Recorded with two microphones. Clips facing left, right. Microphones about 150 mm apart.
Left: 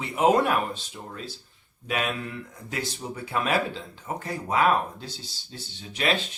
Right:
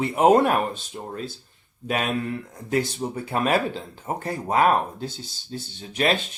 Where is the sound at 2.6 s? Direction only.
45° right (ahead or behind).